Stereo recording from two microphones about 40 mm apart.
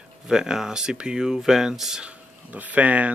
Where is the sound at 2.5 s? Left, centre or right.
Right.